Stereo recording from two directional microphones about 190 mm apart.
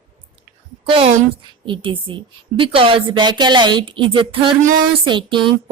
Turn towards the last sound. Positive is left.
turn(degrees=-25)  # may be behind; listen again after turning